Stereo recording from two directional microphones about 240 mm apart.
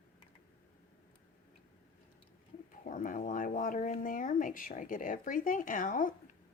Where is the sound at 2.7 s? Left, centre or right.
Left.